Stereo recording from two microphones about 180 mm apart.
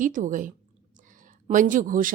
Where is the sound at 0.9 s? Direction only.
45° right (ahead or behind).